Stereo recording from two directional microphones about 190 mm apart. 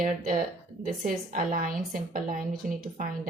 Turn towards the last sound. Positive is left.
turn(degrees=-45)  # may be behind; listen again after turning